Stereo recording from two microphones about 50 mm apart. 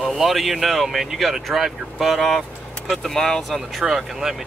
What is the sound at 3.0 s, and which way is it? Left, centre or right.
Speech, centre.